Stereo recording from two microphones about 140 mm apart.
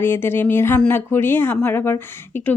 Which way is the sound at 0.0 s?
15° left (ahead or behind).